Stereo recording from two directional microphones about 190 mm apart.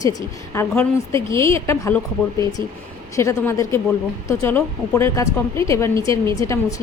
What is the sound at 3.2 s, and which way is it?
A woman's voice, 15° left (ahead or behind).